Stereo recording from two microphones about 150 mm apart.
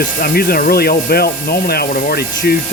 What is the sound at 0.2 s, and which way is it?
Speech, 90° left.